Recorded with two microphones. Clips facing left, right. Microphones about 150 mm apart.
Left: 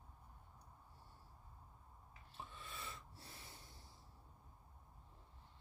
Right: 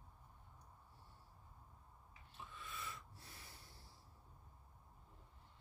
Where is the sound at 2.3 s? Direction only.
30° left (ahead or behind).